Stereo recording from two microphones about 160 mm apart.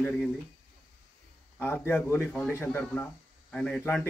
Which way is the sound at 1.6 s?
15° left (ahead or behind).